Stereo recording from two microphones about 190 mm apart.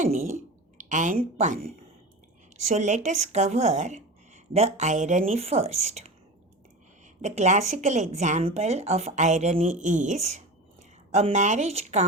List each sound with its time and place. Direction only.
0.0 s a sound: 40° right (ahead or behind)
2.6 s speech: 35° right (ahead or behind)
7.2 s speech: 35° right (ahead or behind)